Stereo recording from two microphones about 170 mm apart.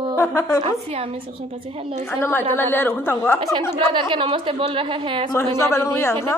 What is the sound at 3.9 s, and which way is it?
A woman's voice, 30° right (ahead or behind).